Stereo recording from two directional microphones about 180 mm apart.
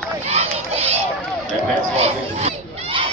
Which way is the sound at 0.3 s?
35° right (ahead or behind).